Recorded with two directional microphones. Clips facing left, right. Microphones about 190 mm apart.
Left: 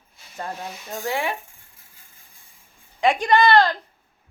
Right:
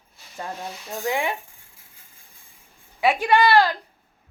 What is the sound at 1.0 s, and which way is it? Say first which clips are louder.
Speech: right 1 dB; 20° right (ahead or behind).